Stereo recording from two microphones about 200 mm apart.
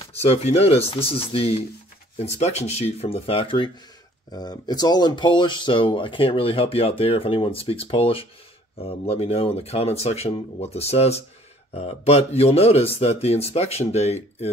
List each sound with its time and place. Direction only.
0.2 s speech: 30° left (ahead or behind)